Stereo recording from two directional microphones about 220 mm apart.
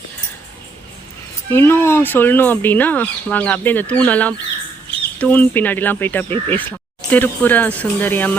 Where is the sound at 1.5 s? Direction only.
10° left (ahead or behind).